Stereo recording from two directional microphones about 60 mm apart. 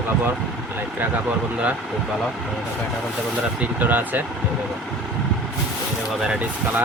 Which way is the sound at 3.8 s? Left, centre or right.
Right.